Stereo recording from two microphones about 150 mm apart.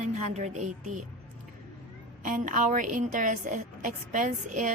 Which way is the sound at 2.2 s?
60° right (ahead or behind).